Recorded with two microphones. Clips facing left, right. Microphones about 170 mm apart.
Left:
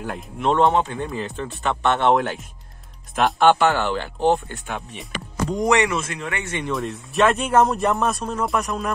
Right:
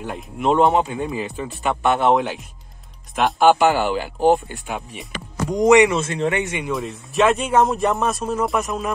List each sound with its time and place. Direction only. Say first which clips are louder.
0.0 s speech: right 1 dB; centre (ahead or behind)
3.5 s speech: right 2 dB; 15° right (ahead or behind)
6.7 s speech: even; centre (ahead or behind)